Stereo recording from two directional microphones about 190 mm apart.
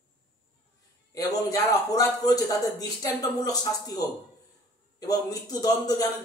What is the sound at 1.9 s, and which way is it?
Speech, 20° left (ahead or behind).